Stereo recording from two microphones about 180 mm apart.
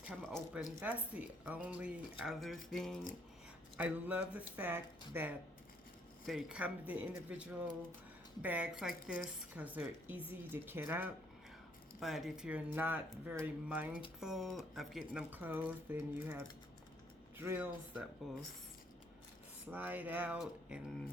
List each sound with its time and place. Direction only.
0.0 s speech: 5° right (ahead or behind)
11.9 s speech: centre (ahead or behind)
19.7 s speech: 10° right (ahead or behind)